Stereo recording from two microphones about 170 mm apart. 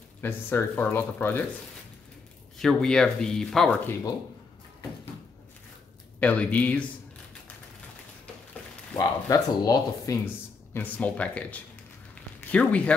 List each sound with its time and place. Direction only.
0.2 s speech: 10° left (ahead or behind)
2.6 s speech: 5° left (ahead or behind)
6.1 s speech: 10° left (ahead or behind)
8.9 s speech: 20° left (ahead or behind)